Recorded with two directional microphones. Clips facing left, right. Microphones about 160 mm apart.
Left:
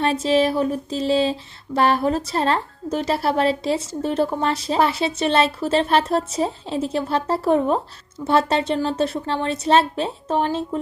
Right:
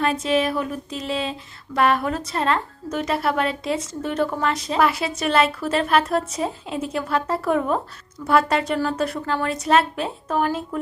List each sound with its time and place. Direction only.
0.0 s a woman's voice: 30° left (ahead or behind)